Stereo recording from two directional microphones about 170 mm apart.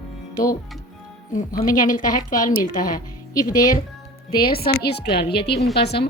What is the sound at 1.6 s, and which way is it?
A woman's voice, 50° left (ahead or behind).